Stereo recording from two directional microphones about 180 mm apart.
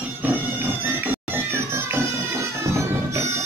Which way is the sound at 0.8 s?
10° right (ahead or behind).